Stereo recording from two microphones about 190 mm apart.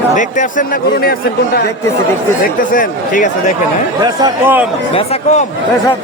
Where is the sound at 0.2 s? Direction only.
40° left (ahead or behind).